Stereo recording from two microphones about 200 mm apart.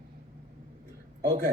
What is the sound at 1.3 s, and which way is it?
Speech, 50° right (ahead or behind).